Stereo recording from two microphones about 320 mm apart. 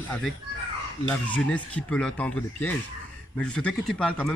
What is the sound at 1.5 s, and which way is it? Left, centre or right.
Speech, centre.